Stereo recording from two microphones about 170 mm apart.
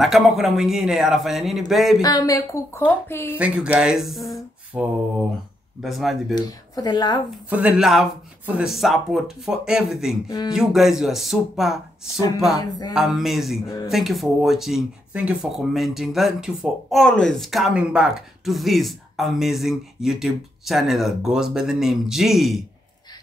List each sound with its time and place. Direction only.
0.0 s speech: centre (ahead or behind)
2.0 s a woman's voice: 20° left (ahead or behind)
3.3 s speech: 5° right (ahead or behind)
6.3 s a woman's voice: 20° left (ahead or behind)
7.4 s speech: 5° right (ahead or behind)
12.5 s a woman's voice: 20° left (ahead or behind)
12.9 s speech: centre (ahead or behind)